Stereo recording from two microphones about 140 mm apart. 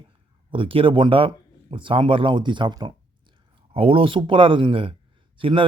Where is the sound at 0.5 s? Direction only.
40° right (ahead or behind).